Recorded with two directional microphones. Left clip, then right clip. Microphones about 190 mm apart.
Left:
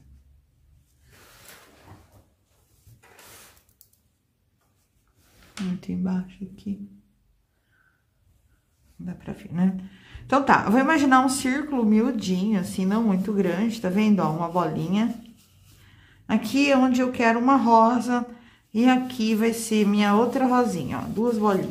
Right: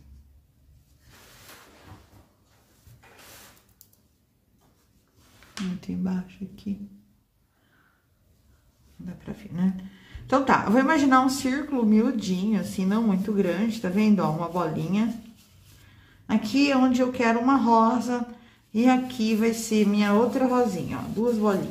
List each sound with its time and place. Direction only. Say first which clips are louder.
5.8 s speech: left 3 dB; 15° left (ahead or behind)
9.0 s speech: left 2 dB; 25° left (ahead or behind)